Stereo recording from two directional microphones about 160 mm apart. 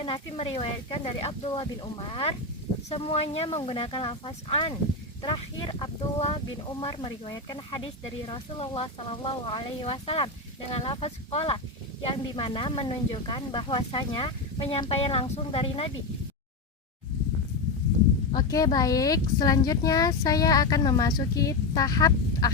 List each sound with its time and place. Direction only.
0.0 s speech: 35° left (ahead or behind)
18.3 s speech: 25° left (ahead or behind)